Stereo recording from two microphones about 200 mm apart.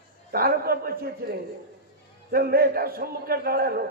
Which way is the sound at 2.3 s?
50° right (ahead or behind).